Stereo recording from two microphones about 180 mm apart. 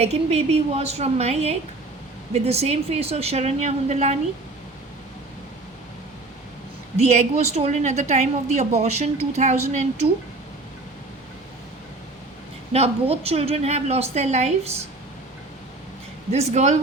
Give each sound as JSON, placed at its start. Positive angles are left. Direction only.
{"t": 0.0, "sound": "a woman's voice", "side_deg": -35}
{"t": 6.9, "sound": "a woman's voice", "side_deg": -35}
{"t": 12.7, "sound": "a woman's voice", "side_deg": -35}
{"t": 16.3, "sound": "a woman's voice", "side_deg": -40}